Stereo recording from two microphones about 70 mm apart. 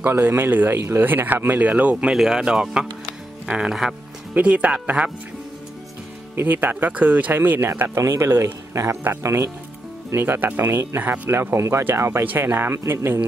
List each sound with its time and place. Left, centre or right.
0.0 s speech: right
2.1 s speech: centre
6.3 s speech: right
10.1 s speech: right